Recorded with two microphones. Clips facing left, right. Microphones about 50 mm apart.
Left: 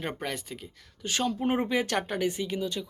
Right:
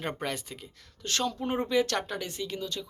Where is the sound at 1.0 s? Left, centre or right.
Centre.